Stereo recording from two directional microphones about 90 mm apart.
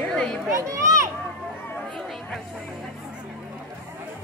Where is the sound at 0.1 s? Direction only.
10° left (ahead or behind).